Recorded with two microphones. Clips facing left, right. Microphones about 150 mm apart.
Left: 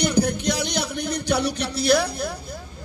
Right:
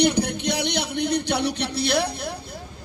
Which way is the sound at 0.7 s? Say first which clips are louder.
Right 1 dB; 60° right (ahead or behind).